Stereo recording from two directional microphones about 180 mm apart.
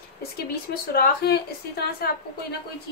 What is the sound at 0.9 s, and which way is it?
A woman's voice, 60° left (ahead or behind).